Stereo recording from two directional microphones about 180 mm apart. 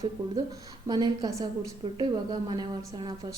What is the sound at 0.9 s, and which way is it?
A woman's voice, 20° right (ahead or behind).